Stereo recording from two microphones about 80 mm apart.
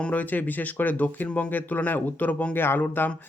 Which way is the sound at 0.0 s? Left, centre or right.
Centre.